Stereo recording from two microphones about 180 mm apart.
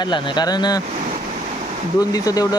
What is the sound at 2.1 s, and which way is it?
Speech, 20° left (ahead or behind).